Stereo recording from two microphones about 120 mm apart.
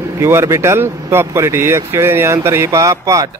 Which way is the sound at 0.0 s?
25° right (ahead or behind).